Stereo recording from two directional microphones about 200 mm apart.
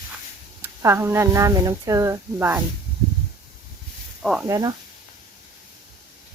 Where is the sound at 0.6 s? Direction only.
10° right (ahead or behind).